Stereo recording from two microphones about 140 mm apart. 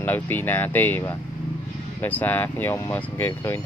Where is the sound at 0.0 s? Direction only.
15° left (ahead or behind).